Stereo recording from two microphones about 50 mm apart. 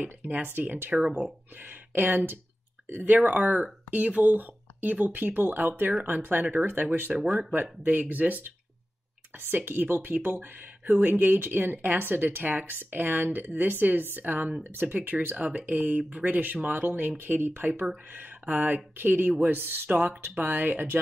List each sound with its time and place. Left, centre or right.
0.0 s speech: right
1.0 s speech: right
2.0 s speech: right
18.1 s speech: right